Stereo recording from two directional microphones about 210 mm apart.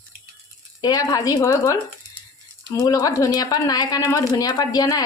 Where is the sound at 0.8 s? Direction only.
15° left (ahead or behind).